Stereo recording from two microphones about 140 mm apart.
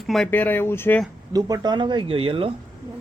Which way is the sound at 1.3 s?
30° right (ahead or behind).